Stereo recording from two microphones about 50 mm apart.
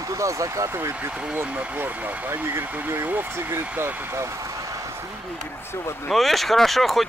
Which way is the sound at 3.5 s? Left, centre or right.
Right.